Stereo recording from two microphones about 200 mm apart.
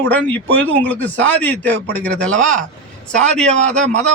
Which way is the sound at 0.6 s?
10° left (ahead or behind).